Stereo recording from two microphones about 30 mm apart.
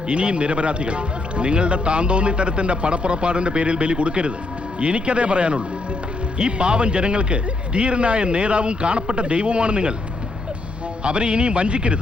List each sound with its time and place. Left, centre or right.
0.1 s a man's voice: right
11.0 s a man's voice: right